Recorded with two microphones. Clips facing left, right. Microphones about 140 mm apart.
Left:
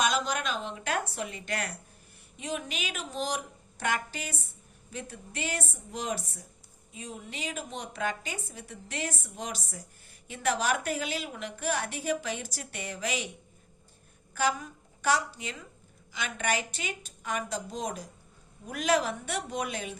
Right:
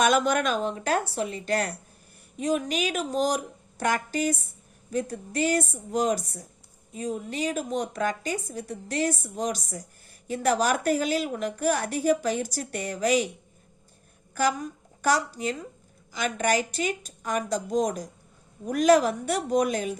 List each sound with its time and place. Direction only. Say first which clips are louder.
0.0 s a woman's voice: right 7 dB; 55° right (ahead or behind)
14.3 s a woman's voice: right 4 dB; 40° right (ahead or behind)